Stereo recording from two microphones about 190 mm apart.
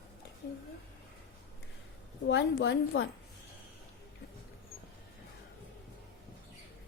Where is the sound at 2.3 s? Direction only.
85° left; by 3.0 s 65° left (ahead or behind).